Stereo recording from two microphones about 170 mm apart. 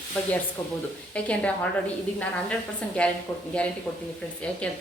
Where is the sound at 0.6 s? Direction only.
15° left (ahead or behind).